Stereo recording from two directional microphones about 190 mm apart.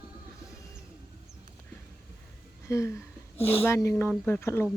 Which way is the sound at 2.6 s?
15° left (ahead or behind).